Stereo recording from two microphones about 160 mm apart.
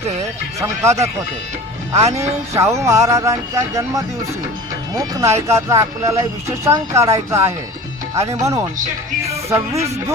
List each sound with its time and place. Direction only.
0.6 s speech: 20° right (ahead or behind)
2.1 s speech: 15° right (ahead or behind)